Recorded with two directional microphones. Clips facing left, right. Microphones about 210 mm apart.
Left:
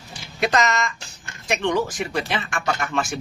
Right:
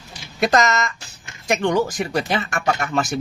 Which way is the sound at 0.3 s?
40° right (ahead or behind).